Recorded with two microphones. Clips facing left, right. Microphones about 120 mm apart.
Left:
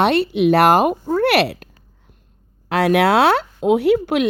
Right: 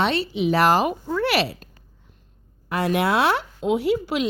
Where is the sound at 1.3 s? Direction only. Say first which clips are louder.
Left 6 dB; 65° left (ahead or behind).